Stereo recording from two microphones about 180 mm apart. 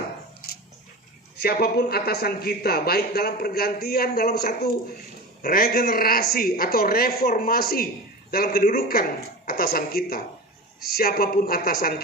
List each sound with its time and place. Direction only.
1.4 s a man's voice: 60° left (ahead or behind)